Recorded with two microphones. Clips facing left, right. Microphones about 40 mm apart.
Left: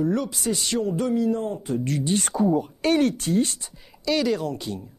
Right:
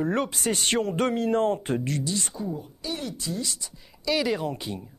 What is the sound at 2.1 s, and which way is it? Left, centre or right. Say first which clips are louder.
Speech: left 10 dB; left.